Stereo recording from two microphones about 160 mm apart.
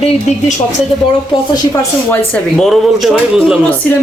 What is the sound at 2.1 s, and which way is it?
Speech, 5° left (ahead or behind).